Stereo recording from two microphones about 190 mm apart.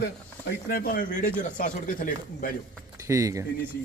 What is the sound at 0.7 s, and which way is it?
Speech, 50° left (ahead or behind).